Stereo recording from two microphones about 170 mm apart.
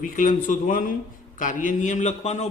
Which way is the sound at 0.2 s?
50° left (ahead or behind).